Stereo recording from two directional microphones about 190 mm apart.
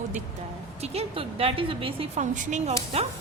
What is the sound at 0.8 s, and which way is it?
A woman's voice, 35° right (ahead or behind).